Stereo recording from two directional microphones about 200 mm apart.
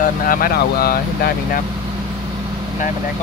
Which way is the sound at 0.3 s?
45° left (ahead or behind).